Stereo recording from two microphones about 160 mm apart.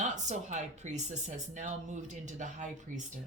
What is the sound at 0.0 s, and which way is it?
Speech, 50° right (ahead or behind).